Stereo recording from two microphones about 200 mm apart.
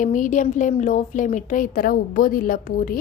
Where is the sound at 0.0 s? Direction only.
40° left (ahead or behind).